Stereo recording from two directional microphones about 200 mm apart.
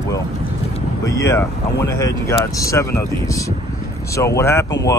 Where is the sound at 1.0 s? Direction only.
15° left (ahead or behind).